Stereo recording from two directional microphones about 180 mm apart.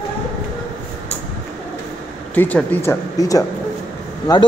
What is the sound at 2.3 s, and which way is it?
A man's voice, 10° left (ahead or behind).